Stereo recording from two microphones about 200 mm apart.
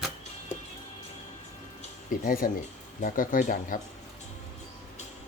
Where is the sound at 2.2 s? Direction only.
45° left (ahead or behind).